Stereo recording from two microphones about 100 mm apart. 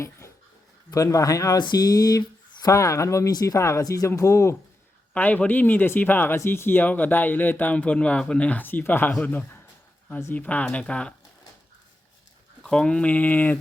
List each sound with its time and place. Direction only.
0.9 s speech: 35° left (ahead or behind)
5.1 s speech: 15° left (ahead or behind)
12.6 s speech: 5° left (ahead or behind)